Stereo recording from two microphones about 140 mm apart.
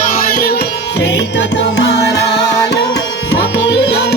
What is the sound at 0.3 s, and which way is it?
Music, 90° left.